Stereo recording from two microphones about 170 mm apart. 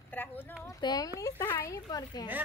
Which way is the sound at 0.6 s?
20° left (ahead or behind).